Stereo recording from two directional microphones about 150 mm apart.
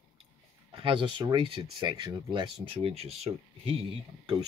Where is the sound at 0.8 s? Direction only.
35° right (ahead or behind).